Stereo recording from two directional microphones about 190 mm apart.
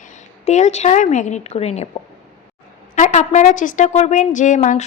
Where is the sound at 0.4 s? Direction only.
35° left (ahead or behind).